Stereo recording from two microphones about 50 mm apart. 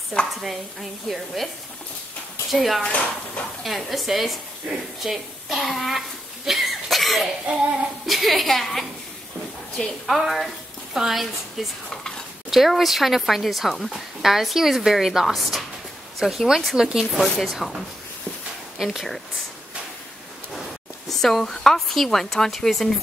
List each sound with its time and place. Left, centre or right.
0.4 s speech: centre
2.5 s speech: centre
4.6 s speech: right
5.0 s a sound: centre
7.5 s child singing: centre
8.1 s speech: centre
10.0 s a woman's voice: centre
17.0 s speech: centre
18.9 s speech: centre
21.1 s speech: centre